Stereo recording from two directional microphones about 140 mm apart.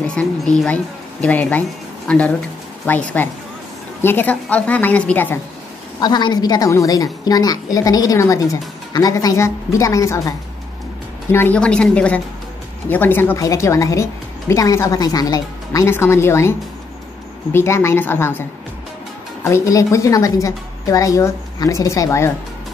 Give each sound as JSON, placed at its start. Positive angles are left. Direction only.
{"t": 0.0, "sound": "a woman's voice", "side_deg": 10}
{"t": 5.9, "sound": "a woman's voice", "side_deg": 30}
{"t": 11.3, "sound": "a woman's voice", "side_deg": 10}
{"t": 19.4, "sound": "a woman's voice", "side_deg": 25}